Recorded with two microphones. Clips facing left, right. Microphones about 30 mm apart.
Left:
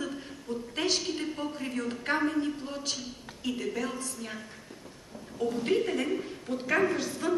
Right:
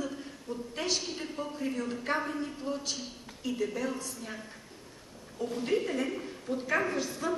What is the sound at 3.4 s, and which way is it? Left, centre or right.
Speech, left.